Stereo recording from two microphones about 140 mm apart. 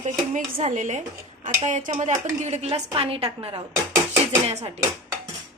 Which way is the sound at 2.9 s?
40° right (ahead or behind).